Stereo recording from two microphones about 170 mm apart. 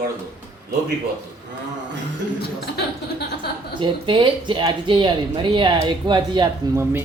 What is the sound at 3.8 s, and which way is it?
Speech, 30° right (ahead or behind).